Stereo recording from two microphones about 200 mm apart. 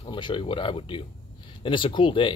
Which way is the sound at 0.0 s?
25° left (ahead or behind).